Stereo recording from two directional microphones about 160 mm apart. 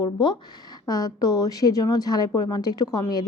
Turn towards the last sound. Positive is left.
turn(degrees=25)  # may be behind; listen again after turning